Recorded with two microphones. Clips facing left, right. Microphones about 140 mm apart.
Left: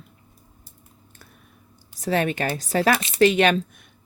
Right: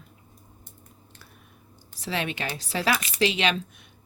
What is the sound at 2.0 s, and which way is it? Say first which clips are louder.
Speech: left 7 dB; 45° left (ahead or behind).